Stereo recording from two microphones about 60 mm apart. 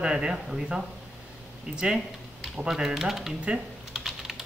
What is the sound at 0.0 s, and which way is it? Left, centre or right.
Speech, centre.